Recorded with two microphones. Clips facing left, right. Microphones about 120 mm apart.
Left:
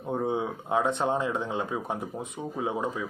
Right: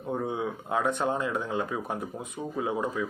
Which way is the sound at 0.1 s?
25° left (ahead or behind).